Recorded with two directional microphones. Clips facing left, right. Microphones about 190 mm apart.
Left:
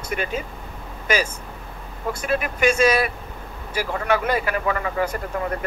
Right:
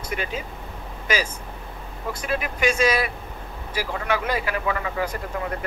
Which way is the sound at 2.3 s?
50° left (ahead or behind).